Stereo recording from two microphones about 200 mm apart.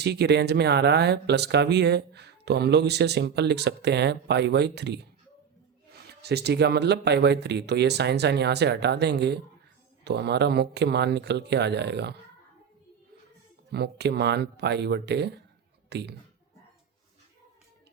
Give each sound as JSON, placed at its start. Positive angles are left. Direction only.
{"t": 0.0, "sound": "speech", "side_deg": -55}
{"t": 13.7, "sound": "speech", "side_deg": -55}